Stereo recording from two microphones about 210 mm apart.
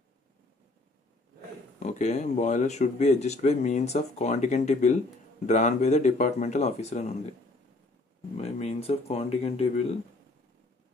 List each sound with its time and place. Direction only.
1.8 s speech: 35° left (ahead or behind)
8.4 s speech: 30° left (ahead or behind)